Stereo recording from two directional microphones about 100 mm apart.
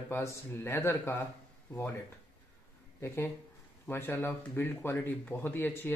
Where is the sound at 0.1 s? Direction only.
25° left (ahead or behind).